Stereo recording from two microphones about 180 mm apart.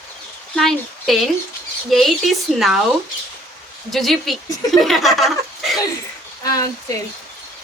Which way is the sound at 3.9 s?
Centre (ahead or behind).